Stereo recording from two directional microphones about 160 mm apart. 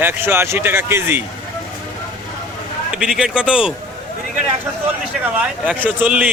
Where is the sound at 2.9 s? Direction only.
5° right (ahead or behind).